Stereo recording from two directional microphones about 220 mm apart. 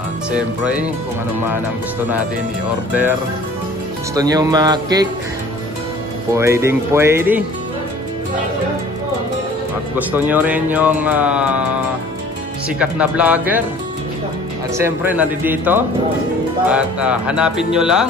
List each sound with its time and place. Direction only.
0.3 s speech: 5° right (ahead or behind)
2.9 s speech: 10° right (ahead or behind)
6.3 s speech: 10° right (ahead or behind)
9.9 s speech: 10° right (ahead or behind)
12.6 s speech: 5° right (ahead or behind)
14.8 s speech: 10° right (ahead or behind)